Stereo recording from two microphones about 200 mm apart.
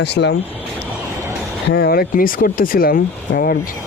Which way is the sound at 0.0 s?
60° left (ahead or behind).